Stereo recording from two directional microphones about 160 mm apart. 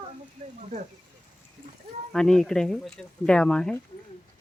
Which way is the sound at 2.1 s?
5° left (ahead or behind).